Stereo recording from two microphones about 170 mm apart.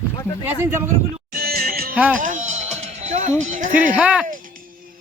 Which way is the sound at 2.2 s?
50° right (ahead or behind).